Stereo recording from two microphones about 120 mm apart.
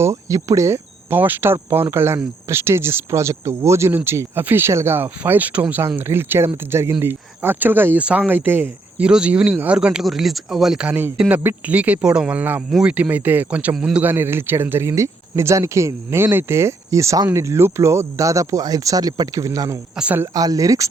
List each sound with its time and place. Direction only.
0.0 s cricket: 25° right (ahead or behind)
1.7 s speech: 20° right (ahead or behind)
14.0 s speech: 15° right (ahead or behind)
20.0 s speech: 10° right (ahead or behind)
20.2 s speech: 30° right (ahead or behind)